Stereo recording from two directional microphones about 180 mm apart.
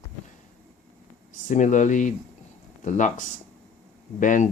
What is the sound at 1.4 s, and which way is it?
Speech, 45° left (ahead or behind).